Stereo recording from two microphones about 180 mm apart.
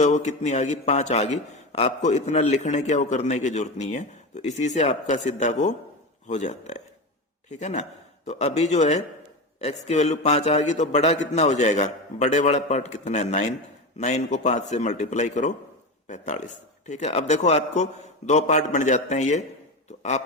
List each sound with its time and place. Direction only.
0.0 s a man's voice: 40° left (ahead or behind)